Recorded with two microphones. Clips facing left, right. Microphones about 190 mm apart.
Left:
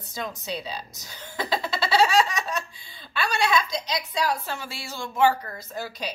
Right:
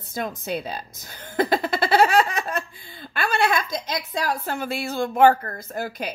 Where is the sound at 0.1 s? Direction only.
50° right (ahead or behind).